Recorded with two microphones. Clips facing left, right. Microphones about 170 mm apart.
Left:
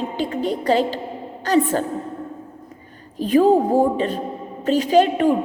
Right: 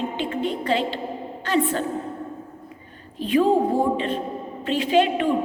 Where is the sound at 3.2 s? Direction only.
40° left (ahead or behind).